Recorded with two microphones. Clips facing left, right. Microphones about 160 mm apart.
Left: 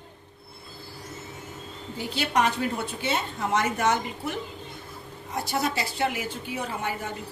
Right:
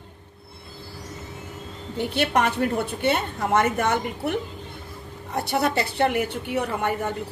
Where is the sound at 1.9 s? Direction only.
60° right (ahead or behind).